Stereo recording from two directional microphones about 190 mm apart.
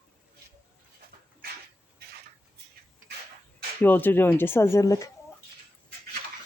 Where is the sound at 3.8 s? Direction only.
10° left (ahead or behind).